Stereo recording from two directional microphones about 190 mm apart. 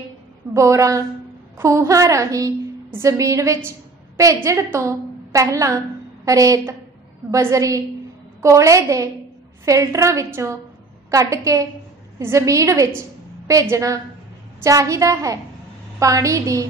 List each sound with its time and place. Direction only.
0.6 s a woman's voice: 15° right (ahead or behind)